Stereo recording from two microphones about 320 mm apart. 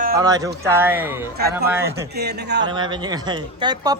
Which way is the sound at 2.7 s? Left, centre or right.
Centre.